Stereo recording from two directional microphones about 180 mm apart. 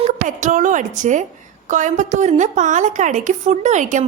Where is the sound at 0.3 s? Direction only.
45° right (ahead or behind).